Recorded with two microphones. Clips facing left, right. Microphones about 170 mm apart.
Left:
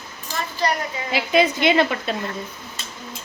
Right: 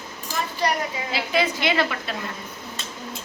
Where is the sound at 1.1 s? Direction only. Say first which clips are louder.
Left 6 dB; 15° left (ahead or behind).